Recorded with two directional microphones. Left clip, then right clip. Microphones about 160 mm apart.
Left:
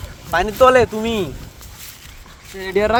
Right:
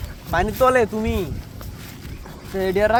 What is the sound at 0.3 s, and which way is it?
Speech, centre (ahead or behind).